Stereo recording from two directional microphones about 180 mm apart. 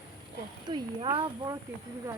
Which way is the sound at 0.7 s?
25° right (ahead or behind).